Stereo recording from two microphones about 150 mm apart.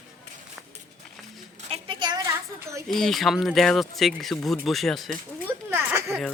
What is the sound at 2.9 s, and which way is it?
Speech, centre (ahead or behind).